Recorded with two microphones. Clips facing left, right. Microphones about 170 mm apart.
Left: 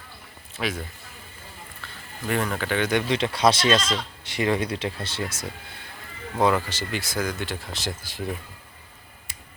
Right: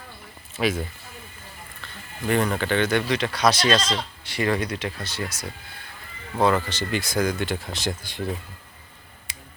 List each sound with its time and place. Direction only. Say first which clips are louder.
0.6 s speech: right 5 dB; 5° right (ahead or behind)
2.2 s speech: right 3 dB; centre (ahead or behind)
3.1 s speech: left 1 dB; 25° left (ahead or behind)
6.4 s speech: right 1 dB; 5° left (ahead or behind)